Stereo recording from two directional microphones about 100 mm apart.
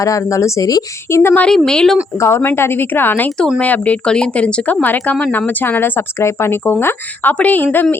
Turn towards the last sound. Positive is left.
turn(degrees=20)  # may be behind; listen again after turning